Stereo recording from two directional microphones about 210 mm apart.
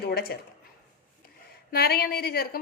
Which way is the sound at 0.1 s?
45° left (ahead or behind).